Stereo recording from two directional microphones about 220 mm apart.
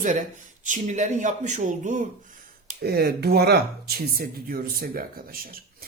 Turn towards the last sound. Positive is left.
turn(degrees=-40)  # may be behind; listen again after turning